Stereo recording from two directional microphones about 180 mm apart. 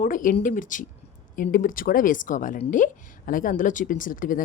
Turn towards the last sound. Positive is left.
turn(degrees=50)  # may be behind; listen again after turning